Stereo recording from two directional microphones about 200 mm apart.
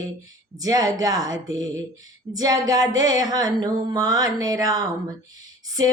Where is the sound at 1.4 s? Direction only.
20° right (ahead or behind).